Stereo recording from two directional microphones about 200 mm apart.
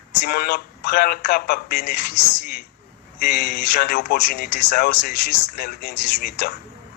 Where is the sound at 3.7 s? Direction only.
45° left (ahead or behind).